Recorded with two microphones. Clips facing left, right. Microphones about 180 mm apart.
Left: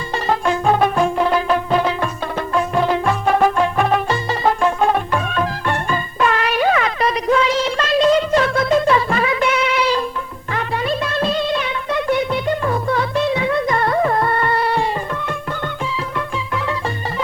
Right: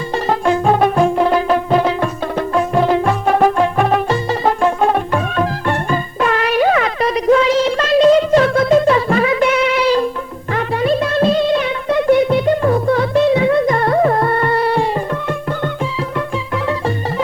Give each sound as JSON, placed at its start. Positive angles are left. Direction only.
{"t": 0.1, "sound": "music", "side_deg": -45}